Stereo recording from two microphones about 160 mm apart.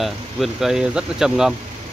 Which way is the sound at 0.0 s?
Centre (ahead or behind).